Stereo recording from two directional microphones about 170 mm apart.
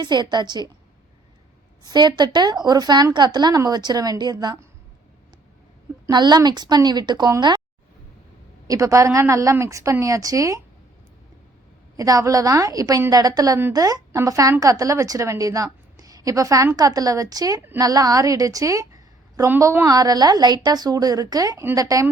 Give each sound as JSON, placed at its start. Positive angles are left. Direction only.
{"t": 0.0, "sound": "a woman's voice", "side_deg": -25}
{"t": 1.8, "sound": "a woman's voice", "side_deg": -25}
{"t": 6.1, "sound": "a woman's voice", "side_deg": -25}
{"t": 8.6, "sound": "a woman's voice", "side_deg": -20}
{"t": 11.9, "sound": "a woman's voice", "side_deg": -20}